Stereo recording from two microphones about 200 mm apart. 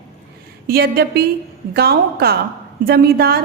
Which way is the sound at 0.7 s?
50° right (ahead or behind).